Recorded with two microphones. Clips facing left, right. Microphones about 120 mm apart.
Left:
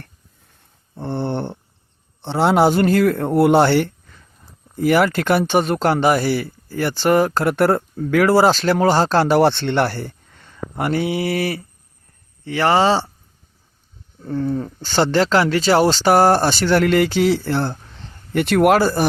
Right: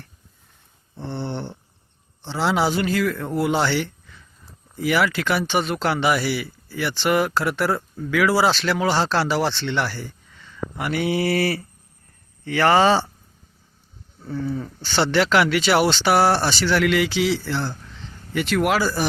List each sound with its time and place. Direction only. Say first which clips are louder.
0.9 s a sound: left 6 dB; 50° left (ahead or behind)
2.2 s speech: left 6 dB; 55° left (ahead or behind)
10.9 s mantra: even; 25° left (ahead or behind)
14.3 s speech: left 5 dB; 50° left (ahead or behind)